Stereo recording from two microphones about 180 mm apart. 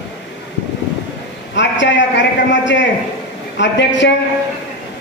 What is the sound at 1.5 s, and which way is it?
A man's voice, 90° left.